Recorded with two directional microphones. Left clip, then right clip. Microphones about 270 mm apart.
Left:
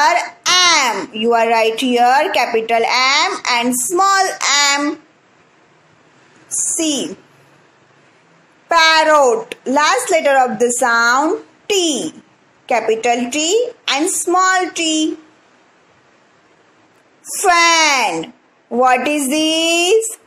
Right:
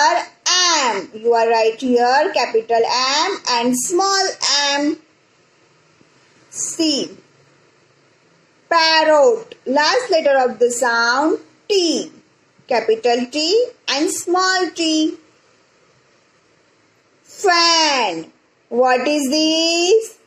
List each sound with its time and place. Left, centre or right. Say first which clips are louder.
0.0 s a child's voice: left 2 dB; left
6.6 s a woman's voice: even; left
8.7 s a child's voice: left 2 dB; left
17.4 s a child's voice: left 3 dB; left